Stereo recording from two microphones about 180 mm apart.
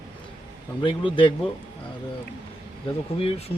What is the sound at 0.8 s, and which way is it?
Speech, 25° left (ahead or behind).